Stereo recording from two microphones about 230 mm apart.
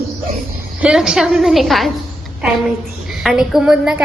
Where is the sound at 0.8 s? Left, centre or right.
Centre.